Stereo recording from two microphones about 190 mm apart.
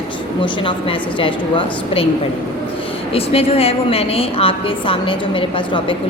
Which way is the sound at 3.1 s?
30° left (ahead or behind).